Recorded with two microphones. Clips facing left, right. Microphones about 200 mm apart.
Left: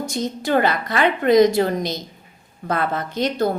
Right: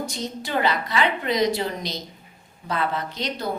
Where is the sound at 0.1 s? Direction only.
50° left (ahead or behind).